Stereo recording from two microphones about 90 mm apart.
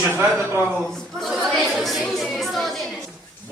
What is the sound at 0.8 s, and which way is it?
A woman's voice, 5° left (ahead or behind).